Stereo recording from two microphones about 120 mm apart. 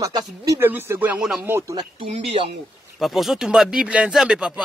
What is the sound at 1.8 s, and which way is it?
Speech, 50° right (ahead or behind).